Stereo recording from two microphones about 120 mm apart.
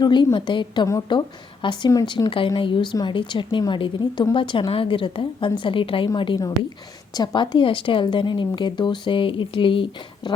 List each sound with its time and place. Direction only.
0.0 s a woman's voice: 40° left (ahead or behind)